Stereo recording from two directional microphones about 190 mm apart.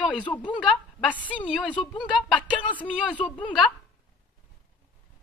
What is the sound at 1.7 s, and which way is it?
Speech, 25° left (ahead or behind).